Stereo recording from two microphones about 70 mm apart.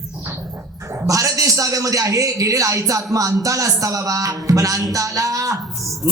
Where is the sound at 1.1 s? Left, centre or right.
Right.